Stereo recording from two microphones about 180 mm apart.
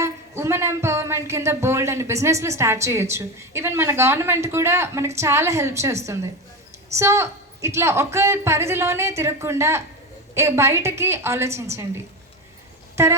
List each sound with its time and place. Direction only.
0.0 s speech: 15° right (ahead or behind)